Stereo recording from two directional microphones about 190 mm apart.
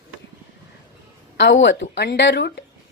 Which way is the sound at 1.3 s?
70° left (ahead or behind).